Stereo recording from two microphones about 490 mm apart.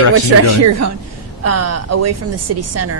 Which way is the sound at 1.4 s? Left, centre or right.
Right.